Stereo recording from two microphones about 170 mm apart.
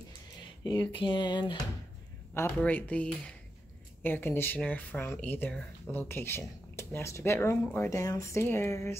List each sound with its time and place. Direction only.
0.4 s speech: 25° left (ahead or behind)
2.3 s speech: 10° left (ahead or behind)